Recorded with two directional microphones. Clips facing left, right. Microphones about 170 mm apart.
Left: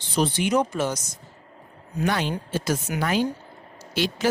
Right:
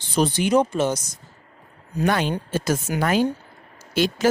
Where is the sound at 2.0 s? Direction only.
50° right (ahead or behind).